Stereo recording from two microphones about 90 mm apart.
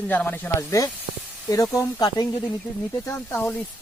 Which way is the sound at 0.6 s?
35° left (ahead or behind).